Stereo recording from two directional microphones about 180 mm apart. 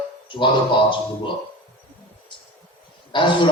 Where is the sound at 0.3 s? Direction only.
25° left (ahead or behind).